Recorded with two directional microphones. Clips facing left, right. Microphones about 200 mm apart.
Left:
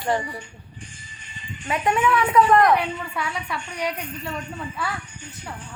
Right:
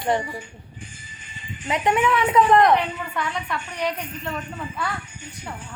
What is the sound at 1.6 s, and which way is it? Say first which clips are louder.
A woman's voice: right 1 dB; 20° right (ahead or behind).